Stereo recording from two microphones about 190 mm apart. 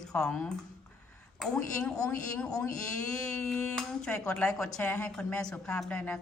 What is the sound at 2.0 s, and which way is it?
Speech, 5° left (ahead or behind).